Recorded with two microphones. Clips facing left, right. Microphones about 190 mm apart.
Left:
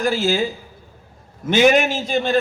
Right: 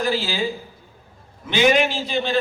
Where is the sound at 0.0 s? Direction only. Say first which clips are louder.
Left 4 dB; 45° left (ahead or behind).